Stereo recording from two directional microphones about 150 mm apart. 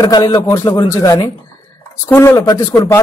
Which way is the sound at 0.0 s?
30° left (ahead or behind).